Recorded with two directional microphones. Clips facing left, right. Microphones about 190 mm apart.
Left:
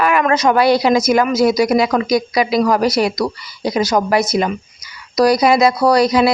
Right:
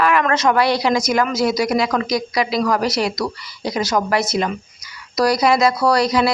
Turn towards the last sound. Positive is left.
turn(degrees=20)  # may be behind; listen again after turning